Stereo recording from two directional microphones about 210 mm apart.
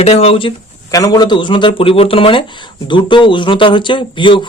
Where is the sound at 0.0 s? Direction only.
30° left (ahead or behind).